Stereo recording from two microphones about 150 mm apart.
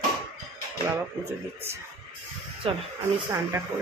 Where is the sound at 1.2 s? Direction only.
20° right (ahead or behind).